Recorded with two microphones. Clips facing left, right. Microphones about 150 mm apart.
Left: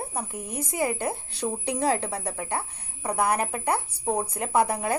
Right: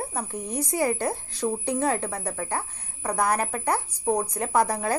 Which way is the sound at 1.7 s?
30° left (ahead or behind).